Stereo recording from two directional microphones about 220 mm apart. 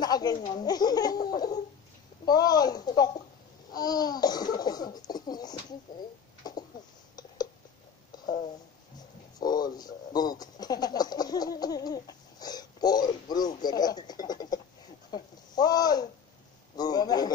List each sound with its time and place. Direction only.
0.0 s a sound: 20° left (ahead or behind)
0.6 s speech: 20° left (ahead or behind)
9.4 s speech: 20° left (ahead or behind)